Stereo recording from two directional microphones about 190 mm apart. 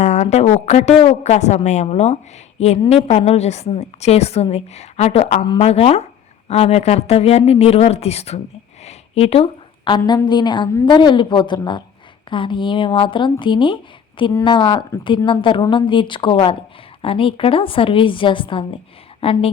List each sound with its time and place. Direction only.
0.0 s a woman's voice: 35° left (ahead or behind)
8.8 s a sound: 35° left (ahead or behind)
10.0 s a woman's voice: 20° left (ahead or behind)